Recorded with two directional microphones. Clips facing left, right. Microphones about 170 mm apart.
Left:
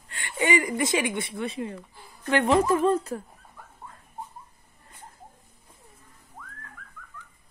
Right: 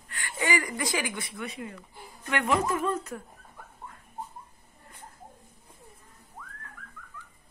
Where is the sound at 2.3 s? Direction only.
30° left (ahead or behind).